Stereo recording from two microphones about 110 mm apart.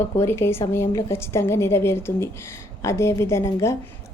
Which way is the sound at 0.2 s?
25° left (ahead or behind).